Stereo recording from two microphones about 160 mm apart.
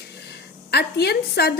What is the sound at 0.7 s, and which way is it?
Speech, 90° left.